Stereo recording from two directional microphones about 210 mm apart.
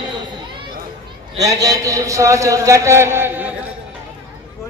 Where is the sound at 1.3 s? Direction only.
15° right (ahead or behind).